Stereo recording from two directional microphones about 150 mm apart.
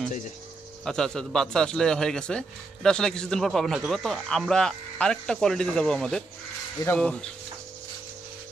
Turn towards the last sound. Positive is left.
turn(degrees=5)  # may be behind; listen again after turning